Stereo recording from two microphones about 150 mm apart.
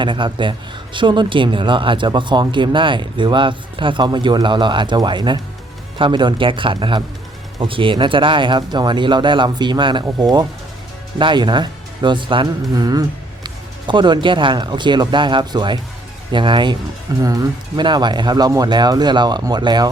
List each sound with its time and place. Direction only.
0.0 s speech: 30° right (ahead or behind)